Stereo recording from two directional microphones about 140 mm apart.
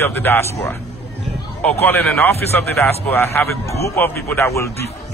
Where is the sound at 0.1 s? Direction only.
15° left (ahead or behind).